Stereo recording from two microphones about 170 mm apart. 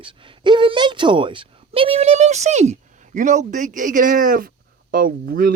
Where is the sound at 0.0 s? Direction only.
30° right (ahead or behind).